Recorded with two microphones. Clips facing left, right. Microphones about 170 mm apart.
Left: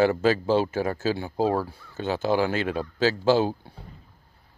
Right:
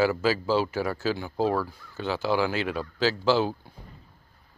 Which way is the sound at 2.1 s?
45° left (ahead or behind).